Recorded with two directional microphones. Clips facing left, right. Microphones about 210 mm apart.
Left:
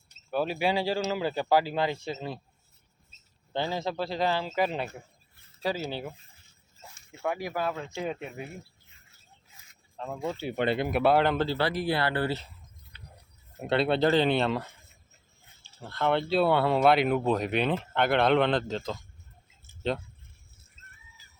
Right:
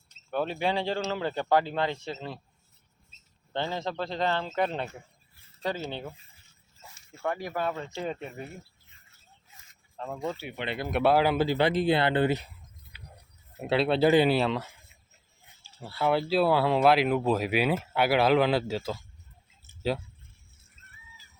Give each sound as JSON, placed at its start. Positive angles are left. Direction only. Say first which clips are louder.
{"t": 0.3, "sound": "speech", "louder": "left 1 dB", "side_deg": 10}
{"t": 3.5, "sound": "speech", "louder": "left 1 dB", "side_deg": 10}
{"t": 7.2, "sound": "speech", "louder": "even", "side_deg": 5}
{"t": 10.0, "sound": "speech", "louder": "even", "side_deg": 0}
{"t": 10.4, "sound": "speech", "louder": "left 7 dB", "side_deg": 40}
{"t": 10.8, "sound": "speech", "louder": "right 2 dB", "side_deg": 0}
{"t": 12.9, "sound": "a sound", "louder": "right 1 dB", "side_deg": -10}
{"t": 13.6, "sound": "speech", "louder": "right 1 dB", "side_deg": 0}